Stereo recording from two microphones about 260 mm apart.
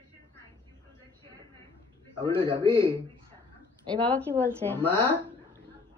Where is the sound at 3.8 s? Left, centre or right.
Centre.